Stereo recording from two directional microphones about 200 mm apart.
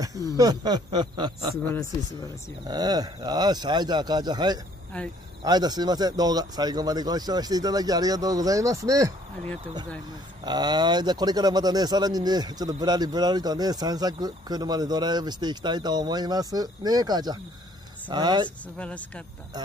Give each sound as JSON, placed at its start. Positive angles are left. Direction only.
{"t": 0.4, "sound": "speech", "side_deg": -20}
{"t": 2.7, "sound": "speech", "side_deg": -20}
{"t": 4.9, "sound": "speech", "side_deg": 5}
{"t": 5.4, "sound": "speech", "side_deg": -20}
{"t": 10.4, "sound": "speech", "side_deg": -20}
{"t": 18.8, "sound": "speech", "side_deg": 5}